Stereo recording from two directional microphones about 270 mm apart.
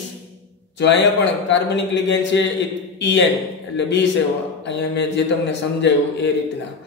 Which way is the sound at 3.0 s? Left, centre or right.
Left.